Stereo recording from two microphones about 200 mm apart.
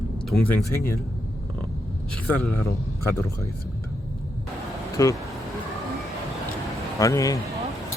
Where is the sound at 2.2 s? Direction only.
10° left (ahead or behind).